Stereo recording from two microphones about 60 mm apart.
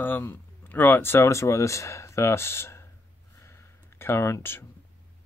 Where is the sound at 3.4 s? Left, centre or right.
Left.